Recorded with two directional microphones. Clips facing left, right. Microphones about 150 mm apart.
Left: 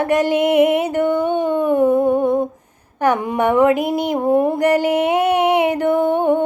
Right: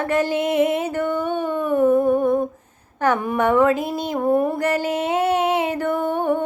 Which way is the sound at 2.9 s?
15° left (ahead or behind).